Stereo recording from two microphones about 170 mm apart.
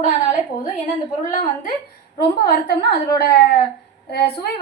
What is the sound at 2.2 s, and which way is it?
A woman's voice, 70° left (ahead or behind).